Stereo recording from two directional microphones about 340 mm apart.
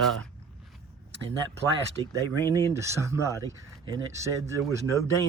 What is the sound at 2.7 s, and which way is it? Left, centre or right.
Speech, centre.